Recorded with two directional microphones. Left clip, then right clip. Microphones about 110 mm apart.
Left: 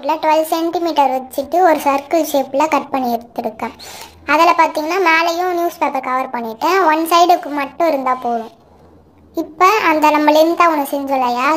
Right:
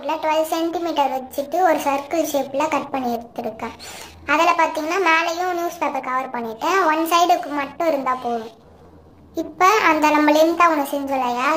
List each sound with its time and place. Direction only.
0.0 s a child's voice: 30° left (ahead or behind)